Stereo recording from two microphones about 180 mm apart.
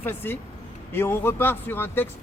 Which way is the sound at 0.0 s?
10° left (ahead or behind).